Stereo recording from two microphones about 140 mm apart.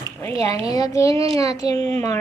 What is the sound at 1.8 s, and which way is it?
Speech, 5° left (ahead or behind).